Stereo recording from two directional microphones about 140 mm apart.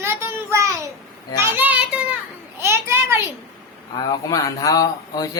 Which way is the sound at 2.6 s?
20° right (ahead or behind).